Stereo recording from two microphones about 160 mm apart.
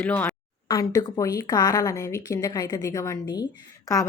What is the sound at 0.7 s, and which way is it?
A woman's voice, 25° left (ahead or behind).